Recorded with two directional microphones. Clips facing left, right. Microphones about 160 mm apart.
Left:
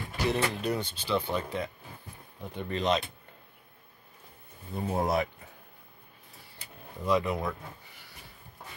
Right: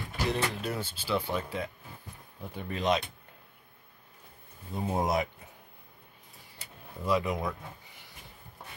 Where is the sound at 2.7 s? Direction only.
10° right (ahead or behind).